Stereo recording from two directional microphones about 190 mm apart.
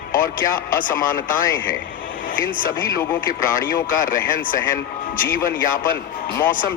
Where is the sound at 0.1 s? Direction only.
45° left (ahead or behind).